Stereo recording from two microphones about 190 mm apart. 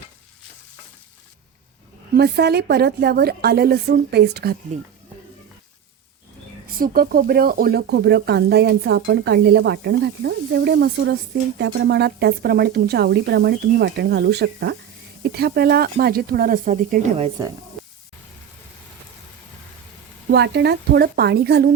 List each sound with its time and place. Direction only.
2.1 s speech: 55° right (ahead or behind)
6.7 s speech: 50° right (ahead or behind)
20.3 s speech: 65° right (ahead or behind)